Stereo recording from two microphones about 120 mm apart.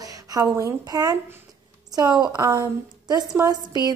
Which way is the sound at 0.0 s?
30° right (ahead or behind).